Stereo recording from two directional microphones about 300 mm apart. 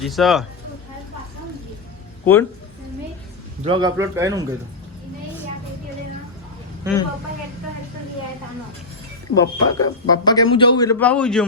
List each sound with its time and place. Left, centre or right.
0.0 s speech: centre
2.2 s a man's voice: centre
3.6 s speech: centre
6.8 s speech: centre
9.3 s a man's voice: centre